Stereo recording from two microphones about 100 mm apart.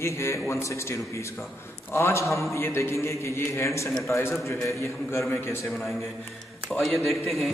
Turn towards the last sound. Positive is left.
turn(degrees=0)  # may be behind; listen again after turning